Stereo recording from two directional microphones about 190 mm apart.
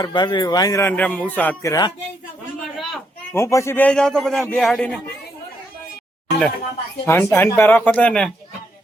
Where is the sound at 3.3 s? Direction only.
15° left (ahead or behind).